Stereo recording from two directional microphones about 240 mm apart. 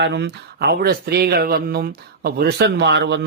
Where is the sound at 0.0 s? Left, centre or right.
Right.